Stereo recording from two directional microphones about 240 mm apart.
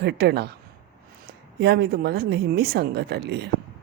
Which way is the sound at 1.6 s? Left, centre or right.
Right.